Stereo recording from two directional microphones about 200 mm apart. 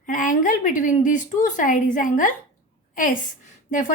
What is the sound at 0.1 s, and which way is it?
A child's voice, 40° left (ahead or behind).